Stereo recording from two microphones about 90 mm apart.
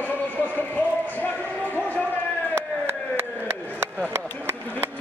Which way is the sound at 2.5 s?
25° right (ahead or behind).